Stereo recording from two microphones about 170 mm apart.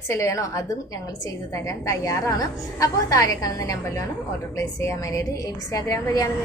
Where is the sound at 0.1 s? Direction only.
20° left (ahead or behind).